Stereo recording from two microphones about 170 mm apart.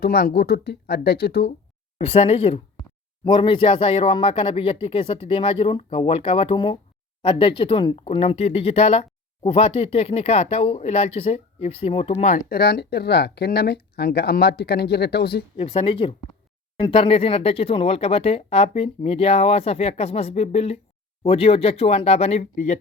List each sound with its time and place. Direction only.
0.0 s speech: 65° left (ahead or behind)
2.0 s speech: 35° left (ahead or behind)
12.3 s speech: 60° left (ahead or behind)
15.5 s speech: 35° left (ahead or behind)